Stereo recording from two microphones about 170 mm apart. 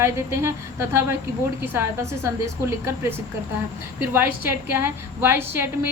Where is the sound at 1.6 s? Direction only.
15° right (ahead or behind).